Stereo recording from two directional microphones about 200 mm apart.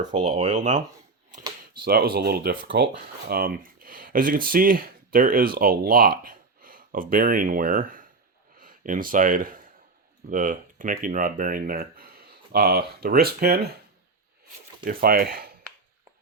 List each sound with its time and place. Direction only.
0.1 s speech: 35° right (ahead or behind)
1.8 s speech: 50° right (ahead or behind)
2.6 s speech: 65° right (ahead or behind)
3.2 s speech: 50° right (ahead or behind)
14.8 s speech: 45° right (ahead or behind)